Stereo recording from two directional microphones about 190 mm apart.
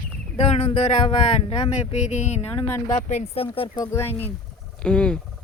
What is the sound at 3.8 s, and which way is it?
Speech, 15° left (ahead or behind).